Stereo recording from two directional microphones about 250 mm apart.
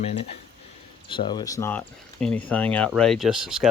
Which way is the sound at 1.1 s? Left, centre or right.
Centre.